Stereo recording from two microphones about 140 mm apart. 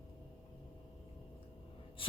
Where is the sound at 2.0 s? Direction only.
40° left (ahead or behind).